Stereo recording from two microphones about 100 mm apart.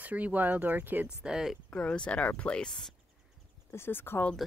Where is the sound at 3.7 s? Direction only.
20° left (ahead or behind).